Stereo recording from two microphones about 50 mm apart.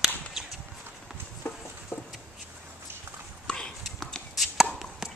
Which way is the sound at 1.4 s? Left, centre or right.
Left.